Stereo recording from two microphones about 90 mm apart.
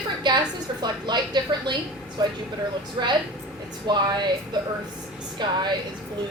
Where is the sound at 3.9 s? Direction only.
55° right (ahead or behind).